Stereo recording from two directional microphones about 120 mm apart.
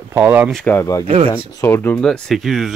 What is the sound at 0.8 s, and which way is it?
Speech, 25° left (ahead or behind).